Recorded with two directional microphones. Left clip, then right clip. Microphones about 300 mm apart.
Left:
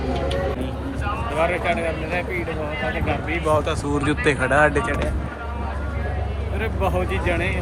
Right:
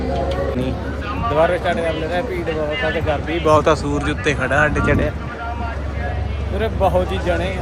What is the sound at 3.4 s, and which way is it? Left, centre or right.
Speech, right.